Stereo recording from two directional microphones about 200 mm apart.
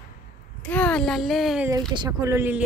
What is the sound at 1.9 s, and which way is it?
Speech, 20° right (ahead or behind).